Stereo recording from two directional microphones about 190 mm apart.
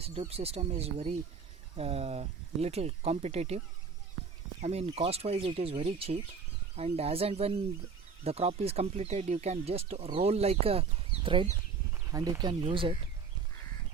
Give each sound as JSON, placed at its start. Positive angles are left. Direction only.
{"t": 0.0, "sound": "speech", "side_deg": -30}
{"t": 4.6, "sound": "speech", "side_deg": -35}